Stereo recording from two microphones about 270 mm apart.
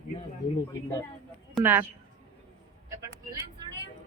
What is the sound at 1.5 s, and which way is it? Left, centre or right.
Speech, centre.